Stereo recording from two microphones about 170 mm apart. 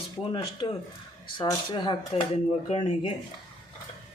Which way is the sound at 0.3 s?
25° left (ahead or behind).